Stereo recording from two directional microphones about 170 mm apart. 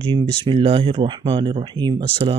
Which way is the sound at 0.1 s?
30° right (ahead or behind).